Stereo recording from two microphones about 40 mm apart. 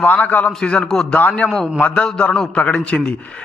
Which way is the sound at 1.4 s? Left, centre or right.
Left.